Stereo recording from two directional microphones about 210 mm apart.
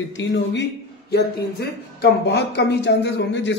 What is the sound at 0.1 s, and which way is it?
Speech, 60° left (ahead or behind).